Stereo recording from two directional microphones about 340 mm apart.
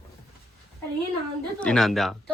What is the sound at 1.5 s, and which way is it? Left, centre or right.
Speech, centre.